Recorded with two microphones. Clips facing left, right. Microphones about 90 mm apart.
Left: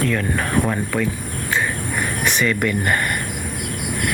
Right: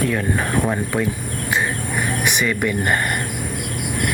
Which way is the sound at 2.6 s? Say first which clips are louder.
Even; 25° right (ahead or behind).